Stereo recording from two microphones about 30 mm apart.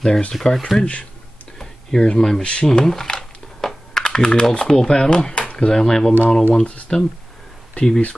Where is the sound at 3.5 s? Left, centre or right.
Centre.